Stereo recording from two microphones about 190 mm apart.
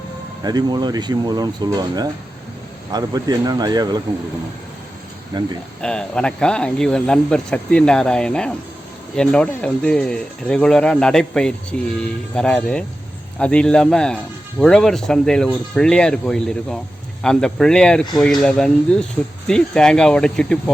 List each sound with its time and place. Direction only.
0.4 s speech: 20° right (ahead or behind)
5.3 s speech: 20° right (ahead or behind)
5.8 s speech: 5° left (ahead or behind)